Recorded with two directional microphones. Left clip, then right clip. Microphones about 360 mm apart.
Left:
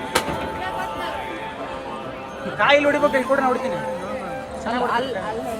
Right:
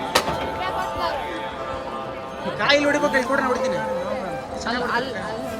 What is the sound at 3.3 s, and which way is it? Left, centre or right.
Speech, centre.